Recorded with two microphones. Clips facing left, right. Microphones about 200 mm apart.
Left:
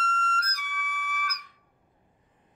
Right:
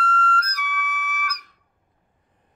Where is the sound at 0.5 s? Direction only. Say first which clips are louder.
Right 8 dB; 70° right (ahead or behind).